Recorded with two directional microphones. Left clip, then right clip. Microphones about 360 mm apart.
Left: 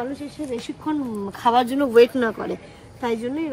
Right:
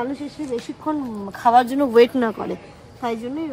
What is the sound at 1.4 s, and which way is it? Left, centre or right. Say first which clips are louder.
Speech: right 3 dB; centre.